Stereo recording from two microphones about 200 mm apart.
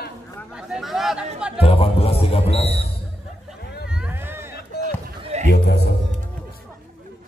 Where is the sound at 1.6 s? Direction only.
30° left (ahead or behind).